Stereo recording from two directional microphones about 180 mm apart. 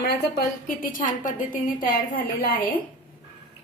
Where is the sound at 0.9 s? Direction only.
45° left (ahead or behind).